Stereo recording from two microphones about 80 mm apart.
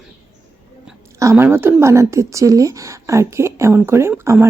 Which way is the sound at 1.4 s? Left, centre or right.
Right.